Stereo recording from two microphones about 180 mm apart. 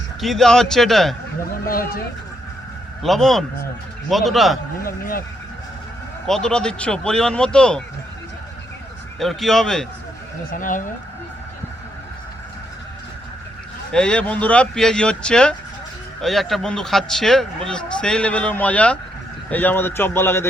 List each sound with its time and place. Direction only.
0.2 s speech: centre (ahead or behind)
1.5 s speech: 55° left (ahead or behind)
3.0 s speech: centre (ahead or behind)
4.8 s speech: 55° left (ahead or behind)
6.2 s speech: 5° left (ahead or behind)
9.1 s speech: centre (ahead or behind)
10.5 s speech: 50° left (ahead or behind)
13.9 s a man's voice: 5° left (ahead or behind)